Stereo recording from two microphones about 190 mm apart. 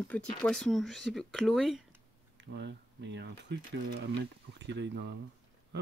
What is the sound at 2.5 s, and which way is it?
Speech, 65° right (ahead or behind).